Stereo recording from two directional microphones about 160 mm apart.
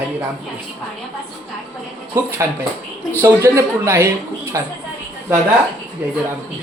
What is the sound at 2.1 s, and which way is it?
Speech, 15° right (ahead or behind).